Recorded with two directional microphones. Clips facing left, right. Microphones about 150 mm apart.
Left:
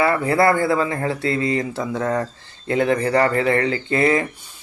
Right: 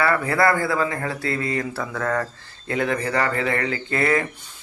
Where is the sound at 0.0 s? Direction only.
20° left (ahead or behind).